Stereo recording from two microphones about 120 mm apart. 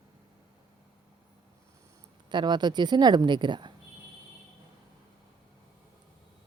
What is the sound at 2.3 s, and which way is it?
Speech, 40° right (ahead or behind).